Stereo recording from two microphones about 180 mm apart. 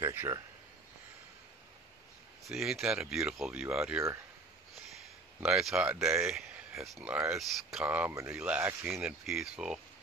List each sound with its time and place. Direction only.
0.0 s speech: 15° right (ahead or behind)
2.4 s speech: centre (ahead or behind)
5.4 s speech: centre (ahead or behind)
6.2 s speech: centre (ahead or behind)